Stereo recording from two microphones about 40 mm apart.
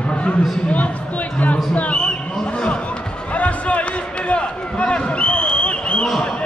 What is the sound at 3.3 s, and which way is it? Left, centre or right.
Run, left.